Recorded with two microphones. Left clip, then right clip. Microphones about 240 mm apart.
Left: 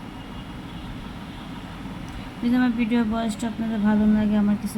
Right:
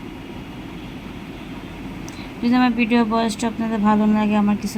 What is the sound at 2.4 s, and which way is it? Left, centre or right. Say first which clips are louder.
A woman's voice: right 5 dB; centre.